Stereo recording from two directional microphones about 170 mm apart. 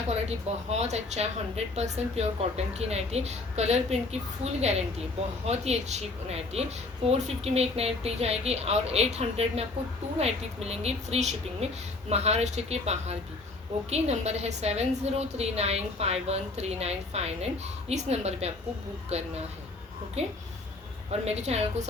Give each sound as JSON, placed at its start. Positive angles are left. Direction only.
{"t": 0.1, "sound": "a woman's voice", "side_deg": -40}